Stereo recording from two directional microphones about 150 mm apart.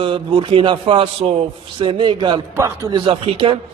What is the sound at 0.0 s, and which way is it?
A man's voice, 35° right (ahead or behind).